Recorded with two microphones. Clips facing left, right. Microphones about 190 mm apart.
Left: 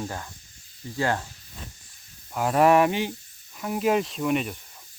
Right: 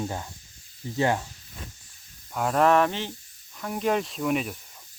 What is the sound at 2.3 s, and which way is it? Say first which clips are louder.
Speech: left 2 dB; 5° left (ahead or behind).